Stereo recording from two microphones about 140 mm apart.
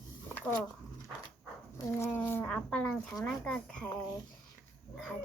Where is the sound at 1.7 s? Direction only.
20° left (ahead or behind).